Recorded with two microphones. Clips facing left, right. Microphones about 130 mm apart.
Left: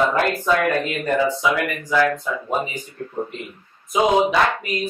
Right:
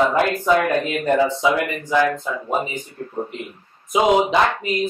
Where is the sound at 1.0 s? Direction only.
25° right (ahead or behind).